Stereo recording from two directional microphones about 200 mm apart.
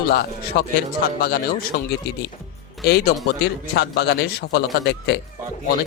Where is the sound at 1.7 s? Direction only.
60° left (ahead or behind).